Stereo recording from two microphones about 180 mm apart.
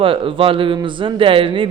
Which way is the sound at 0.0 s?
30° right (ahead or behind).